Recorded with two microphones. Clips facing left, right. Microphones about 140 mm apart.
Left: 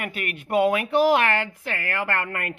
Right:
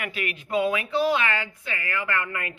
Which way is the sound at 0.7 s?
60° left (ahead or behind).